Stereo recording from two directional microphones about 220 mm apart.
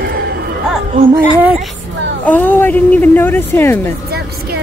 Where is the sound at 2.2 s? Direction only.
10° left (ahead or behind).